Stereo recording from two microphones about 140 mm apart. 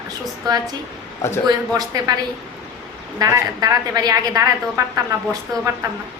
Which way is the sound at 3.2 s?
25° right (ahead or behind).